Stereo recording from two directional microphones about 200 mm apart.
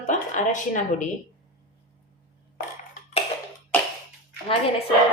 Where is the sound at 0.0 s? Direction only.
40° left (ahead or behind).